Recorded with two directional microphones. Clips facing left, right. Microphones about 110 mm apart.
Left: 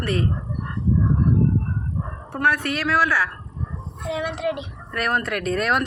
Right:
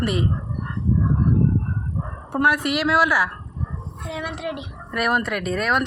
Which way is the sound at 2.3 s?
15° right (ahead or behind).